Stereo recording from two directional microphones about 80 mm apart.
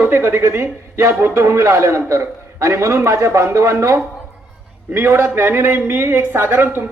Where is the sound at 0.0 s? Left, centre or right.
Right.